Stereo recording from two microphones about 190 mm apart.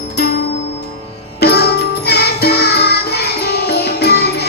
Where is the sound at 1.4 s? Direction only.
60° left (ahead or behind).